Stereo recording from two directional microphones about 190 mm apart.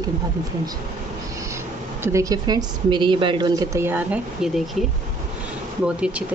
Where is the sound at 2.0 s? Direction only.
15° right (ahead or behind).